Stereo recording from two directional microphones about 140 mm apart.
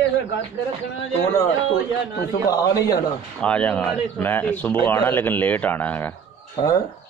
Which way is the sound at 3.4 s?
10° left (ahead or behind).